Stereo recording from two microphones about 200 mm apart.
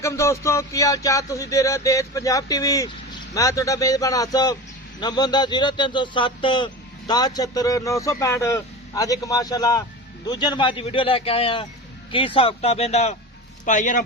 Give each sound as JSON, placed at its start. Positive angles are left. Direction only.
{"t": 0.0, "sound": "a man's voice", "side_deg": 15}